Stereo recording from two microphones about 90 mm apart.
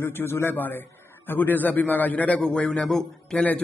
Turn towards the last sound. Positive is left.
turn(degrees=5)  # may be behind; listen again after turning